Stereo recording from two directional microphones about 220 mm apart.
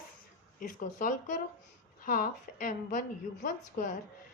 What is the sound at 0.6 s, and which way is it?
A woman's voice, 35° left (ahead or behind).